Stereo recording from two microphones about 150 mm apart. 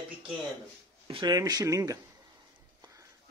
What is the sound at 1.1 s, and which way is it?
Speech, 30° right (ahead or behind).